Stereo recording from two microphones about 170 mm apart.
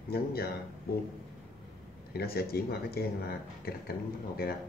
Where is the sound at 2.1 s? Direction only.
65° left (ahead or behind).